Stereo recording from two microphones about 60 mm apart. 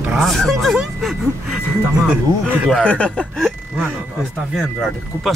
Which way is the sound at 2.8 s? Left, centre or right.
Left.